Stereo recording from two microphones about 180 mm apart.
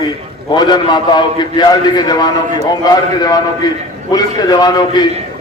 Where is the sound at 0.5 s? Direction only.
25° left (ahead or behind).